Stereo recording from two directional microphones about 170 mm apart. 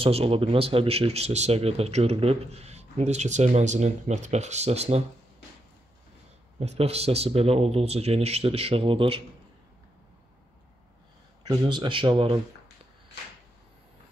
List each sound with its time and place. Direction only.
0.0 s speech: 35° right (ahead or behind)
6.6 s speech: 40° right (ahead or behind)
11.4 s speech: 25° right (ahead or behind)